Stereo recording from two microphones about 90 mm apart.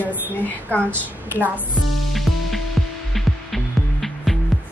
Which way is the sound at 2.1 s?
Centre (ahead or behind).